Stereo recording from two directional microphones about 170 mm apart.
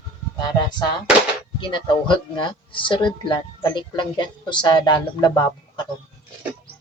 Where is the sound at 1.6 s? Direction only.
25° left (ahead or behind).